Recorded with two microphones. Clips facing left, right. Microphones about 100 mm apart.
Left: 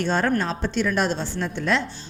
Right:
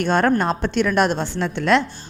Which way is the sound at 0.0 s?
60° right (ahead or behind).